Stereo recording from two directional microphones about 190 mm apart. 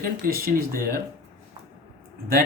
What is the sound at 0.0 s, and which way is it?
Speech, 50° right (ahead or behind).